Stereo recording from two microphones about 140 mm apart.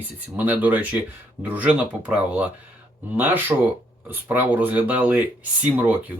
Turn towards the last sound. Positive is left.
turn(degrees=-10)  # may be behind; listen again after turning